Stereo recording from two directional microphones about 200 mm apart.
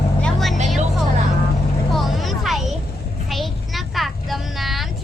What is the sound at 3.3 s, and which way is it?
Vehicle, centre (ahead or behind).